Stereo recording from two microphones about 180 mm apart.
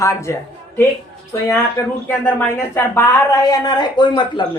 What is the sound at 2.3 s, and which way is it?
Speech, 10° left (ahead or behind).